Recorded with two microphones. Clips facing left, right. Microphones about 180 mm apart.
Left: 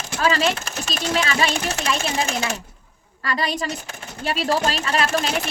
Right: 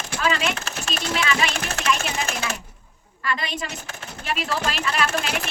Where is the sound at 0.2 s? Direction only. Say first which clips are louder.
Left 4 dB; 35° left (ahead or behind).